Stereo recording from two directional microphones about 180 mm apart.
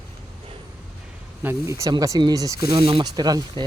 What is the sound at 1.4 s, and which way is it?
Speech, 15° right (ahead or behind).